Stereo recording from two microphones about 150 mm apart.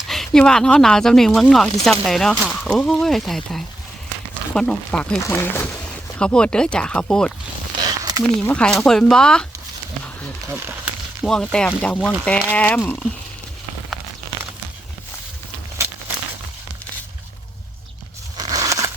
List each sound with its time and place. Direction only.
0.1 s speech: 5° left (ahead or behind)
7.8 s a sound: 25° right (ahead or behind)
8.2 s speech: 5° left (ahead or behind)
10.5 s speech: 15° right (ahead or behind)
11.2 s speech: 5° left (ahead or behind)
18.3 s a sound: 25° right (ahead or behind)